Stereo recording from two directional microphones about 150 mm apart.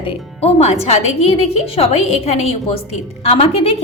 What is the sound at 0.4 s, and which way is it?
A woman's voice, 45° left (ahead or behind).